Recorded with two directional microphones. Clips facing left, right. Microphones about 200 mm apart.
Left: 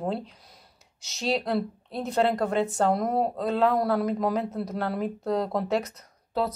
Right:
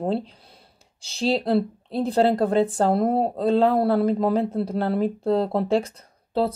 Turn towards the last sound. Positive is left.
turn(degrees=-30)  # may be behind; listen again after turning